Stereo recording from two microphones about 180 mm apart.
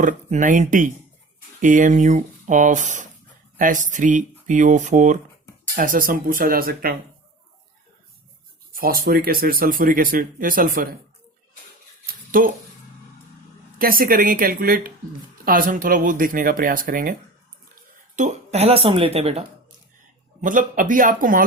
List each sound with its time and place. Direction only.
0.0 s speech: 45° right (ahead or behind)
8.7 s speech: 55° right (ahead or behind)
12.0 s a sound: 50° right (ahead or behind)
13.7 s speech: 50° right (ahead or behind)
18.2 s speech: 35° right (ahead or behind)
20.4 s speech: 45° right (ahead or behind)